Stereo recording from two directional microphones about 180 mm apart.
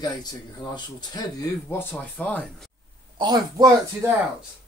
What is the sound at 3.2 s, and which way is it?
Speech, 25° right (ahead or behind).